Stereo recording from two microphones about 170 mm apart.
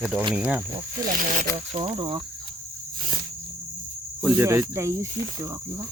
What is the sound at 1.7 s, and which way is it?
Speech, 30° right (ahead or behind).